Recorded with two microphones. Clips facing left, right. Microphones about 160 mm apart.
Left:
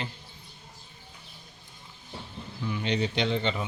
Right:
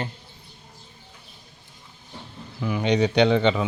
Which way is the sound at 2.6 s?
90° right.